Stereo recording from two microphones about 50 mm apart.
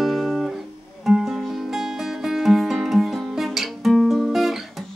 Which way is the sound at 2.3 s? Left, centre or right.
Centre.